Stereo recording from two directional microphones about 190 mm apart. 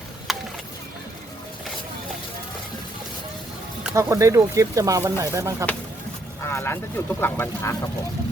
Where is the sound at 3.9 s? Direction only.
15° right (ahead or behind).